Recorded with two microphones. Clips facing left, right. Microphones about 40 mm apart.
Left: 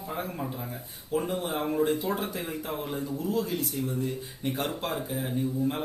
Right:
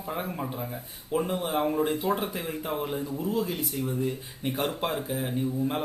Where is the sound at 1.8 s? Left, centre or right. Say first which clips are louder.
Even; right.